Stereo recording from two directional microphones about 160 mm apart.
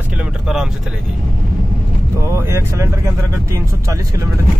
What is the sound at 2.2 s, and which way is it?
Speech, 15° right (ahead or behind).